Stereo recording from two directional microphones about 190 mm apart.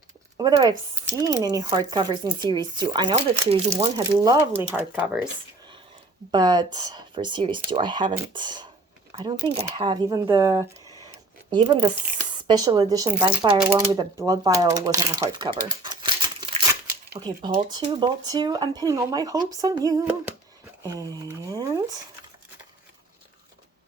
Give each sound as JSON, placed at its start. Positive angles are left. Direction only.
{"t": 0.3, "sound": "speech", "side_deg": -20}
{"t": 4.0, "sound": "speech", "side_deg": -15}
{"t": 6.3, "sound": "speech", "side_deg": -20}
{"t": 11.5, "sound": "speech", "side_deg": -25}